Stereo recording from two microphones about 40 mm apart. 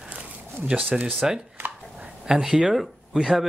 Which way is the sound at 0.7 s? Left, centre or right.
Right.